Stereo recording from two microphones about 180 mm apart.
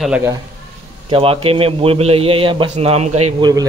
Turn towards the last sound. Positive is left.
turn(degrees=-20)  # may be behind; listen again after turning